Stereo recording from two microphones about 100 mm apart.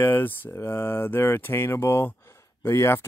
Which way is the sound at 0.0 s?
20° left (ahead or behind).